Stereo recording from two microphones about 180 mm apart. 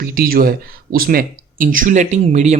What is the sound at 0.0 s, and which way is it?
Speech, 55° right (ahead or behind).